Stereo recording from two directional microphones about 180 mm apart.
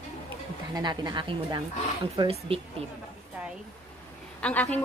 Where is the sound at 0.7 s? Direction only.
20° right (ahead or behind).